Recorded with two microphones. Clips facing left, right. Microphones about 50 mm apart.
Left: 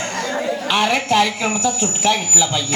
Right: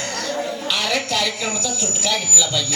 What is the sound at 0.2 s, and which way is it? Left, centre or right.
A woman's voice, left.